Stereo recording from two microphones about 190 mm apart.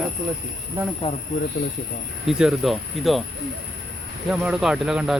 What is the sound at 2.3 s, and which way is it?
Speech, 5° right (ahead or behind).